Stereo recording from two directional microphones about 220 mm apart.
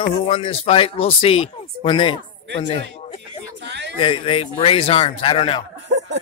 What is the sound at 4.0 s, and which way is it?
Speech, 25° left (ahead or behind).